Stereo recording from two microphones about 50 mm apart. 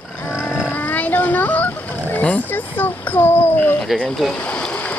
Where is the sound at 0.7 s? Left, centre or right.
Left.